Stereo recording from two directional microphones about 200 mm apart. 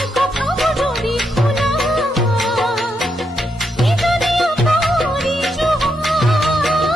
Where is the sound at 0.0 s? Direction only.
Centre (ahead or behind).